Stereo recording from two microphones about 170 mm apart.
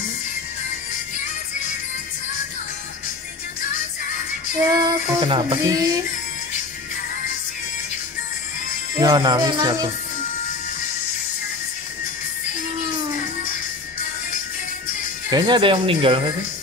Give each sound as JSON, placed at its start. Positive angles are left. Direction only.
{"t": 4.6, "sound": "child singing", "side_deg": -20}
{"t": 9.0, "sound": "child singing", "side_deg": -25}
{"t": 15.3, "sound": "child singing", "side_deg": -25}